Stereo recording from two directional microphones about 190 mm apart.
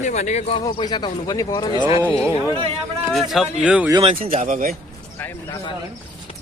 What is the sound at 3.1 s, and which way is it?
Speech, centre (ahead or behind).